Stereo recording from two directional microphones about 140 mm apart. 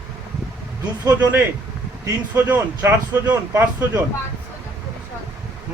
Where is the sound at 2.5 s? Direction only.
15° right (ahead or behind).